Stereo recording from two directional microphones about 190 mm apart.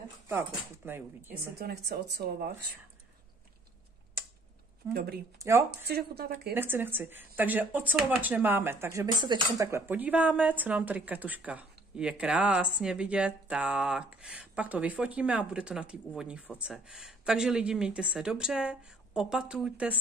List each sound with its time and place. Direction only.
0.3 s speech: 10° right (ahead or behind)
1.6 s speech: 60° right (ahead or behind)
4.9 s speech: 55° right (ahead or behind)
5.4 s speech: 15° right (ahead or behind)
5.9 s speech: 55° right (ahead or behind)
6.5 s speech: 10° right (ahead or behind)